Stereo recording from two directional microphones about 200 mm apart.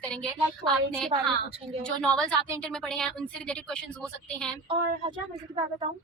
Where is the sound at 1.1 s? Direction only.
30° right (ahead or behind).